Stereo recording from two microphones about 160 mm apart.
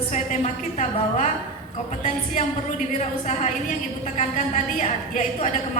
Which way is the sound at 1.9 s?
50° left (ahead or behind).